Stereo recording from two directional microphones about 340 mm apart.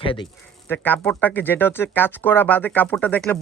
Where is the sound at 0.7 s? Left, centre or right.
Centre.